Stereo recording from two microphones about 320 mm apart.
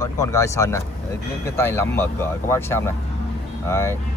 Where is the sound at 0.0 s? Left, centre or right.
Centre.